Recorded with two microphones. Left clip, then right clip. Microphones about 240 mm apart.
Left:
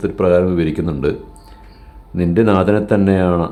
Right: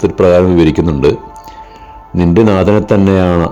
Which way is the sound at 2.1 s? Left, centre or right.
Right.